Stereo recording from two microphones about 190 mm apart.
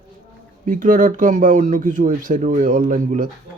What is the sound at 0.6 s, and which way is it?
Speech, 45° right (ahead or behind).